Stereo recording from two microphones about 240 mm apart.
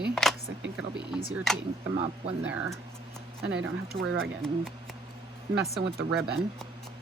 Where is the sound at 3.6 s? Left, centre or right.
Right.